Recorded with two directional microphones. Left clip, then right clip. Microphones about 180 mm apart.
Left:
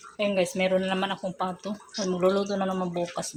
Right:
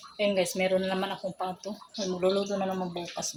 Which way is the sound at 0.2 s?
10° left (ahead or behind).